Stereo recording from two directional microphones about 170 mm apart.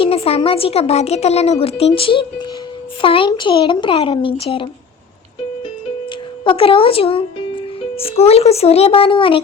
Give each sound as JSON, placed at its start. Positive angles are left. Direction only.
{"t": 0.0, "sound": "speech", "side_deg": 35}
{"t": 6.4, "sound": "speech", "side_deg": 30}